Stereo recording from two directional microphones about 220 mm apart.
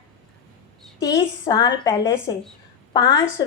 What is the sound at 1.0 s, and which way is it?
A woman's voice, 15° left (ahead or behind).